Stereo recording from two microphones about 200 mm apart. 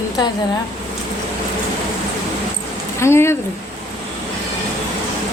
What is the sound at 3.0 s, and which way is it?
Speech, 15° left (ahead or behind).